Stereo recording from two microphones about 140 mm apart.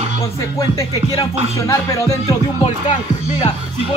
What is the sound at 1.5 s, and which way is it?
Speech, 20° left (ahead or behind).